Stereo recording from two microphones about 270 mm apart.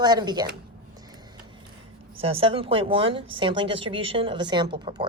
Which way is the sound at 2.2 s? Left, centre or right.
Right.